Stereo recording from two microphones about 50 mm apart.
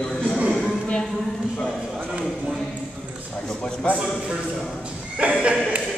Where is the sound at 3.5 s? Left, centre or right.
Centre.